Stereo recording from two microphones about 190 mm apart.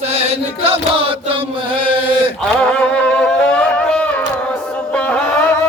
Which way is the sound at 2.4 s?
5° left (ahead or behind).